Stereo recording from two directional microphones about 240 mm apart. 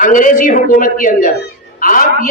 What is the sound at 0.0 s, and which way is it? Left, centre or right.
A man's voice, left.